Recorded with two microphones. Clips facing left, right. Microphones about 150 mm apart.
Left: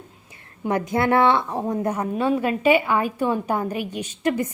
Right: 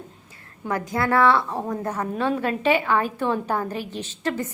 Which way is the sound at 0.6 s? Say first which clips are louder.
Left 3 dB; 20° left (ahead or behind).